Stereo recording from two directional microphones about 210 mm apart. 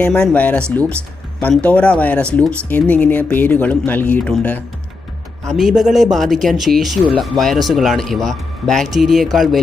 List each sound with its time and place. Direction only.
0.0 s speech: 5° left (ahead or behind)